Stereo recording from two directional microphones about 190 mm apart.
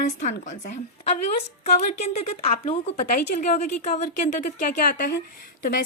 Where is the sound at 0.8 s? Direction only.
35° left (ahead or behind).